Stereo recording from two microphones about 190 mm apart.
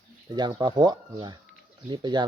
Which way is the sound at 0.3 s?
20° right (ahead or behind).